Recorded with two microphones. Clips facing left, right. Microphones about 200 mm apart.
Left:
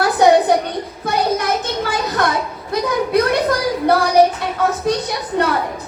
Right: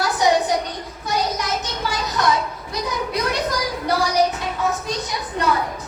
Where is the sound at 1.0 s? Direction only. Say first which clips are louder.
Left 5 dB; 55° left (ahead or behind).